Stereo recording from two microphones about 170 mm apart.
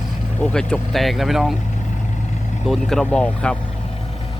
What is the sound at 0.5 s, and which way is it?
Speech, centre (ahead or behind).